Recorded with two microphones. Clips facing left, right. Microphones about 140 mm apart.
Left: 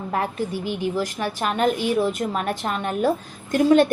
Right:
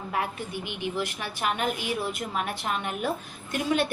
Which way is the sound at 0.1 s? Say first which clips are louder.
Left 6 dB; 40° left (ahead or behind).